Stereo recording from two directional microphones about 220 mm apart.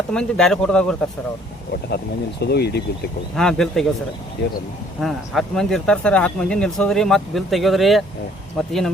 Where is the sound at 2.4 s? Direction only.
45° left (ahead or behind).